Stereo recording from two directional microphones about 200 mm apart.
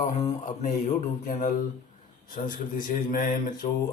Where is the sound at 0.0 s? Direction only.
35° left (ahead or behind).